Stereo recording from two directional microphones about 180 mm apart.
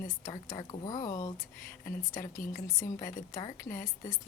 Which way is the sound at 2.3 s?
50° left (ahead or behind).